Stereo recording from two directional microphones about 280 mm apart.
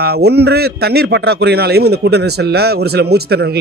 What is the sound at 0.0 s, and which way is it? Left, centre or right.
Speech, right.